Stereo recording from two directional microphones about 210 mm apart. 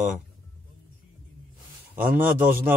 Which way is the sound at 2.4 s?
10° right (ahead or behind).